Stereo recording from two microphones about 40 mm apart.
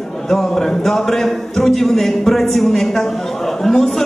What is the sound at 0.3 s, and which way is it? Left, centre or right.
A man's voice, centre.